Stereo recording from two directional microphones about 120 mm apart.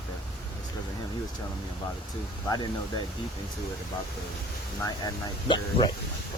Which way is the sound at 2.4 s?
35° left (ahead or behind).